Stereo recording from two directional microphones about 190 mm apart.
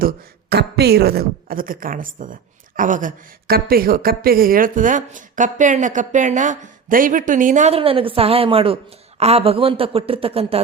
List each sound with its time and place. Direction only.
0.5 s speech: 60° right (ahead or behind); by 10.6 s 30° right (ahead or behind)